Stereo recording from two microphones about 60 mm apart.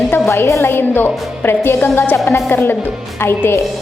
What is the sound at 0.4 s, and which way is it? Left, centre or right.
Speech, left.